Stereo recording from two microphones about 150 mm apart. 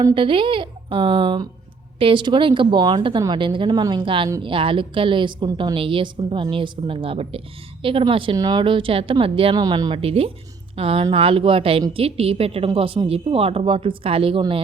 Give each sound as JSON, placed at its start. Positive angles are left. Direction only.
{"t": 0.1, "sound": "a woman's voice", "side_deg": -35}